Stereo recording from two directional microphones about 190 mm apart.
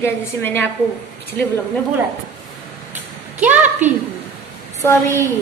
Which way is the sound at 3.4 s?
10° right (ahead or behind).